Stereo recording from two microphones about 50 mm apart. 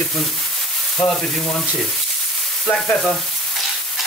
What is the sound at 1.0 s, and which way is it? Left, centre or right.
Frying, centre.